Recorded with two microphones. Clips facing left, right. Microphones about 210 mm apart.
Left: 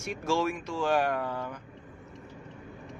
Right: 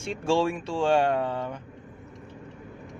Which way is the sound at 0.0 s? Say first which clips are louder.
Right 4 dB; 30° right (ahead or behind).